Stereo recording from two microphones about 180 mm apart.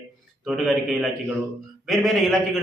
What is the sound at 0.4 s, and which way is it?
A man's voice, centre (ahead or behind).